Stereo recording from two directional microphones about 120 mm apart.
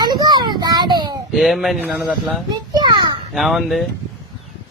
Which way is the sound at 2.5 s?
35° right (ahead or behind).